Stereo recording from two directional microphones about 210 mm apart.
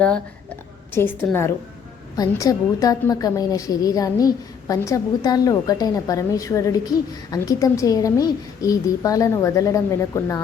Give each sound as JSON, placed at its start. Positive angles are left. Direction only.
{"t": 0.9, "sound": "a woman's voice", "side_deg": 10}